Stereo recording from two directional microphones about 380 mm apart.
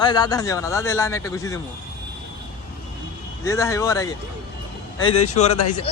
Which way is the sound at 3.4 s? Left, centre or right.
Centre.